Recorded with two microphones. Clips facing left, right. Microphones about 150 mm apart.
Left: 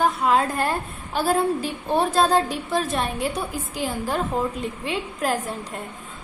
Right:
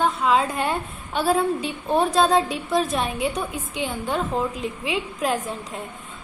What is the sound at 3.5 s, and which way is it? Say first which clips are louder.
Speech: left 1 dB; 35° left (ahead or behind).